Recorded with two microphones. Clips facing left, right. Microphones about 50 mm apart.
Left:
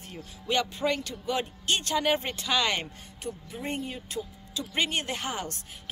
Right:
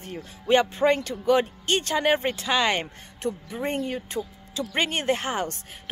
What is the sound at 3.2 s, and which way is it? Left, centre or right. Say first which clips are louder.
Speech: right 7 dB; right.